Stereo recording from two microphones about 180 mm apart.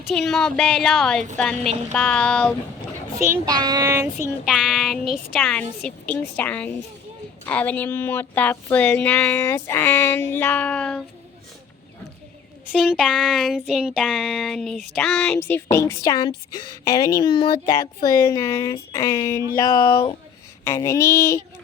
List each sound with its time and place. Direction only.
0.1 s child singing: centre (ahead or behind)
3.2 s a child's voice: 20° right (ahead or behind)
4.4 s child singing: centre (ahead or behind)
6.3 s speech: 10° left (ahead or behind)
12.7 s child singing: centre (ahead or behind)
14.9 s a woman's voice: 5° left (ahead or behind); by 17.7 s 25° left (ahead or behind)
18.3 s speech: 15° left (ahead or behind)
19.9 s a woman's voice: 30° left (ahead or behind)
20.7 s speech: 15° left (ahead or behind)